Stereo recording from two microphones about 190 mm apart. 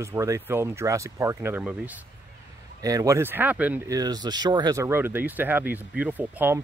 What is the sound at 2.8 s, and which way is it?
Speech, 20° right (ahead or behind).